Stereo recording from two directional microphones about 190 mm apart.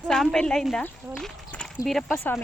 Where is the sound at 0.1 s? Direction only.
5° left (ahead or behind).